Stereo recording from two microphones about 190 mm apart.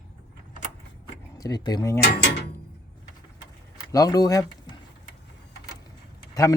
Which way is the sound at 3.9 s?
20° left (ahead or behind).